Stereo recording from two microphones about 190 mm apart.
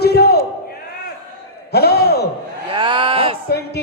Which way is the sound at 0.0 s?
55° left (ahead or behind).